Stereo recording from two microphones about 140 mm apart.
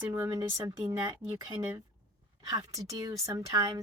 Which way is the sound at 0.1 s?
20° right (ahead or behind).